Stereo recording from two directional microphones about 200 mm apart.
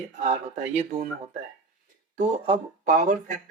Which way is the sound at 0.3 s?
35° right (ahead or behind).